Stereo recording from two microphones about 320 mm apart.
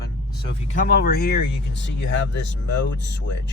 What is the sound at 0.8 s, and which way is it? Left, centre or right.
Speech, left.